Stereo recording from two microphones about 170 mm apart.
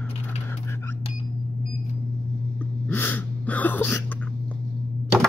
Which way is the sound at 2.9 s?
10° left (ahead or behind).